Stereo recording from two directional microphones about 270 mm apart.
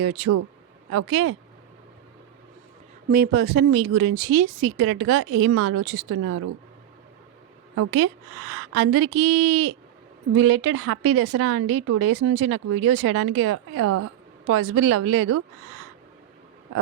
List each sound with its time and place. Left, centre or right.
0.0 s a woman's voice: right
3.1 s speech: right
4.3 s a woman's voice: right
7.8 s a woman's voice: right